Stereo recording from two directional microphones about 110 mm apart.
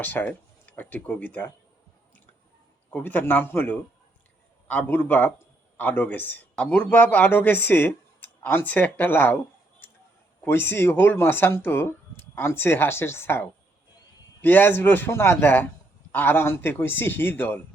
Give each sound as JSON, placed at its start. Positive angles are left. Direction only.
{"t": 0.0, "sound": "speech", "side_deg": 15}
{"t": 2.9, "sound": "a man's voice", "side_deg": 15}
{"t": 9.8, "sound": "a sound", "side_deg": 20}
{"t": 10.4, "sound": "a man's voice", "side_deg": 20}